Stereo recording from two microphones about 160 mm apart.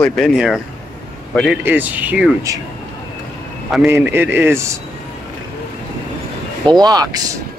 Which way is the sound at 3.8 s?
15° right (ahead or behind).